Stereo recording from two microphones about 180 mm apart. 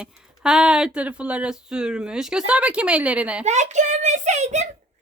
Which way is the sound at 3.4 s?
40° right (ahead or behind).